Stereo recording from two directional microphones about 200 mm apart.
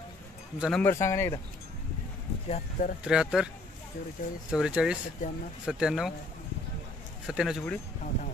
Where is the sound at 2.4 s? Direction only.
30° left (ahead or behind).